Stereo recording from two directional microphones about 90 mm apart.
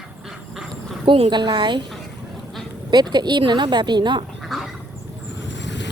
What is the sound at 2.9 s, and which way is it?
Speech, 55° right (ahead or behind).